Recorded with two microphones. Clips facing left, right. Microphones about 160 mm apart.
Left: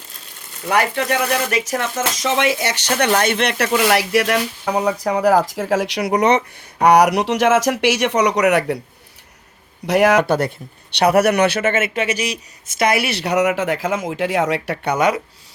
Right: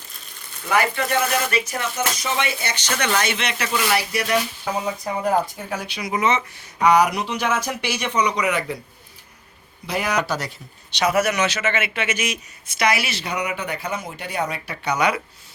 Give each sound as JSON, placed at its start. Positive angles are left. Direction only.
{"t": 0.7, "sound": "speech", "side_deg": 65}
{"t": 1.6, "sound": "speech", "side_deg": 90}
{"t": 3.1, "sound": "speech", "side_deg": 55}
{"t": 6.2, "sound": "speech", "side_deg": 60}
{"t": 9.8, "sound": "speech", "side_deg": 85}
{"t": 10.2, "sound": "speech", "side_deg": 55}
{"t": 14.8, "sound": "speech", "side_deg": 45}